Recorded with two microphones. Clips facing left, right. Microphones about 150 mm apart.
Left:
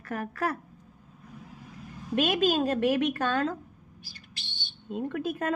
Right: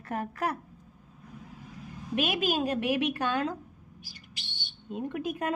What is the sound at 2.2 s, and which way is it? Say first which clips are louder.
A woman's voice: left 4 dB; 10° right (ahead or behind).